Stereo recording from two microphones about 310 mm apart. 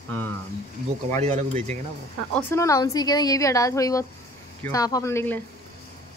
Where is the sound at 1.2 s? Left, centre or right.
Right.